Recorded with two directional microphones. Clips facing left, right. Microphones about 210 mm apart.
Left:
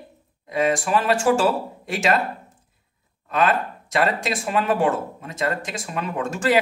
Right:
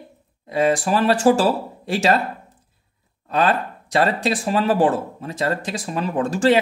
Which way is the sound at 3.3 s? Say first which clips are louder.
Right 1 dB; 35° right (ahead or behind).